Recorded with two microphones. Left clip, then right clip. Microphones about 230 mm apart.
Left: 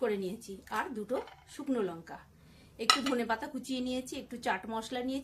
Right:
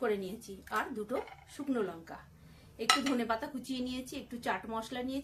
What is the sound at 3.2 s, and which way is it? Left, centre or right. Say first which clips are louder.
A woman's voice: left 1 dB; left.